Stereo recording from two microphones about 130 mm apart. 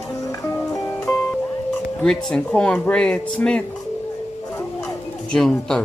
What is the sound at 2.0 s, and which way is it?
Speech, 5° left (ahead or behind).